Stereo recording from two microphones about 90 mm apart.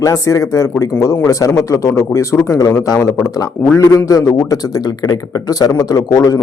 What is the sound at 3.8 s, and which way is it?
A man's voice, 40° left (ahead or behind).